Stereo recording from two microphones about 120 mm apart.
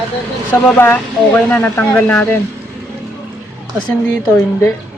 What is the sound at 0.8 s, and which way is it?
Speech, 20° left (ahead or behind).